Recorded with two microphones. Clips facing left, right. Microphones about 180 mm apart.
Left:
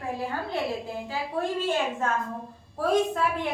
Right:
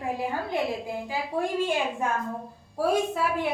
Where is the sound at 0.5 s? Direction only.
15° right (ahead or behind).